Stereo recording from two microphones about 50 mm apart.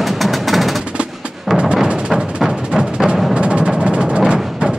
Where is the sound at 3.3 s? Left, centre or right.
Right.